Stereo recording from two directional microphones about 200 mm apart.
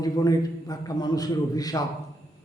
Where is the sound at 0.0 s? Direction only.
20° left (ahead or behind).